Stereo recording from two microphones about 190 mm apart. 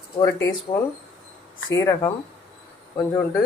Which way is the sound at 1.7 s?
15° left (ahead or behind).